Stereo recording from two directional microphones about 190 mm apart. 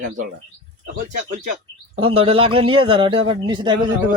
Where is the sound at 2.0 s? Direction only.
30° right (ahead or behind).